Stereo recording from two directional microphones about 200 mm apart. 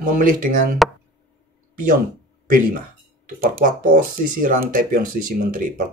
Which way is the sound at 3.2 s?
45° right (ahead or behind).